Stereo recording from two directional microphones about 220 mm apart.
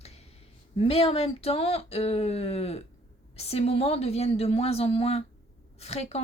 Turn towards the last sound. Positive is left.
turn(degrees=30)  # may be behind; listen again after turning